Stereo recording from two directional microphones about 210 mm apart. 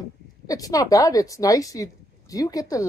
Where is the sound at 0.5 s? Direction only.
15° left (ahead or behind).